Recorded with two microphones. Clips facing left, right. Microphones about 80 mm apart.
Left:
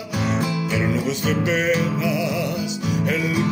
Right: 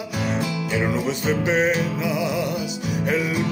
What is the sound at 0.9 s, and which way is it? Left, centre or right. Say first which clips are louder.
Music: even; right.